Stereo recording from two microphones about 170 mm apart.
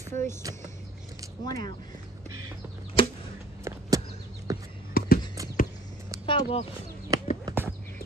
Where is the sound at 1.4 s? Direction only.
20° left (ahead or behind).